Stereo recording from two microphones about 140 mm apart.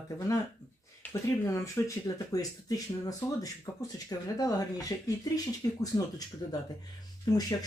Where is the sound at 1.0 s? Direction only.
20° left (ahead or behind).